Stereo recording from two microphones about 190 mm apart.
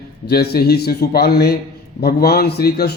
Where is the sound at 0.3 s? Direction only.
55° left (ahead or behind).